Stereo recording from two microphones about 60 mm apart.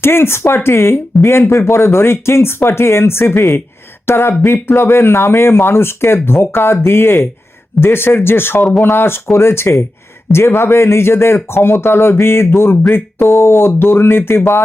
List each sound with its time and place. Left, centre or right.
0.0 s speech: left